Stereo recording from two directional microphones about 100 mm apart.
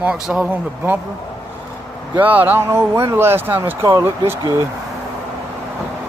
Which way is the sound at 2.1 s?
15° right (ahead or behind).